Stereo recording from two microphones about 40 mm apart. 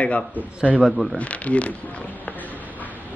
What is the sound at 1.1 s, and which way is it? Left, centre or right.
Speech, left.